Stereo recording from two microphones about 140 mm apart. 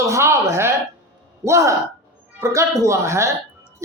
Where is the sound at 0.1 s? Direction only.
20° right (ahead or behind).